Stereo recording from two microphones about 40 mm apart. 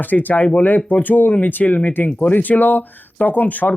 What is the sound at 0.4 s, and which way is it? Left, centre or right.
Speech, left.